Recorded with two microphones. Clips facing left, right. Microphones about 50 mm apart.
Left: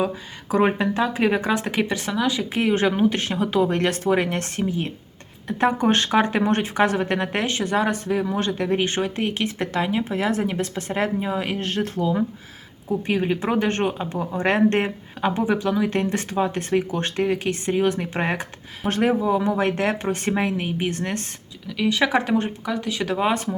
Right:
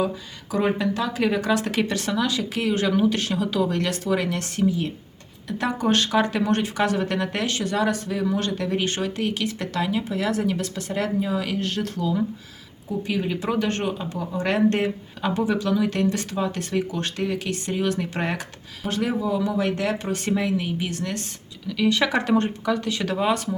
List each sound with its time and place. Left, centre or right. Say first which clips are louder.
0.5 s speech: left 3 dB; left
18.9 s speech: left 4 dB; left
21.7 s speech: left 1 dB; centre